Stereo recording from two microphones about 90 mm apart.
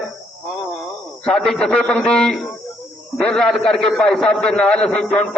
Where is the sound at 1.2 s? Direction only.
5° left (ahead or behind).